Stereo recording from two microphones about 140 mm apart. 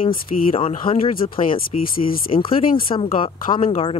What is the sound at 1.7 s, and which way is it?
Speech, 50° left (ahead or behind).